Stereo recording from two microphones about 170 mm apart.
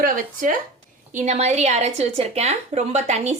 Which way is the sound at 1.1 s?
45° right (ahead or behind).